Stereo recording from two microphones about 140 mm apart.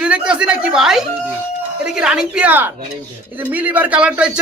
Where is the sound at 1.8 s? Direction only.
5° right (ahead or behind).